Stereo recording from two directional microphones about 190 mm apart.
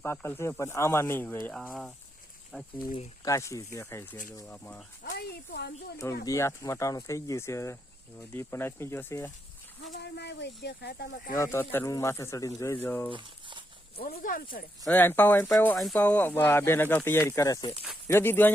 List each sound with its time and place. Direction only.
0.0 s speech: 10° left (ahead or behind)
3.2 s speech: 15° left (ahead or behind)
5.0 s speech: 55° left (ahead or behind)
6.2 s speech: 15° left (ahead or behind)
9.8 s speech: 65° left (ahead or behind)
11.3 s speech: 15° left (ahead or behind)
13.1 s a sound: 25° right (ahead or behind)
13.9 s speech: 50° left (ahead or behind)
14.8 s speech: 10° left (ahead or behind)